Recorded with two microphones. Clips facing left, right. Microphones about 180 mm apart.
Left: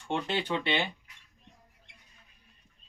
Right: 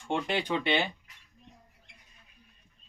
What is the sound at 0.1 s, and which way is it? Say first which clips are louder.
Speech: right 1 dB; 15° right (ahead or behind).